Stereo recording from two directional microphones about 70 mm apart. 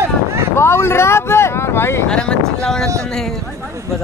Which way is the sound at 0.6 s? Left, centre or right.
Left.